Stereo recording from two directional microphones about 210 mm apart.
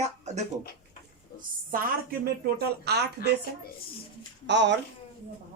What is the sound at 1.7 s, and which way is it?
Speech, 45° right (ahead or behind).